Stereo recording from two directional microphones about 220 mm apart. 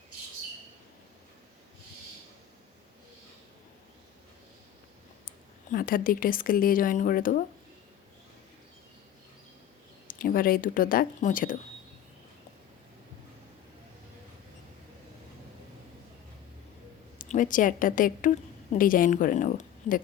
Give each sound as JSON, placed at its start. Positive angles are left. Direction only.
{"t": 5.7, "sound": "speech", "side_deg": 40}
{"t": 10.1, "sound": "speech", "side_deg": 40}
{"t": 17.2, "sound": "speech", "side_deg": 35}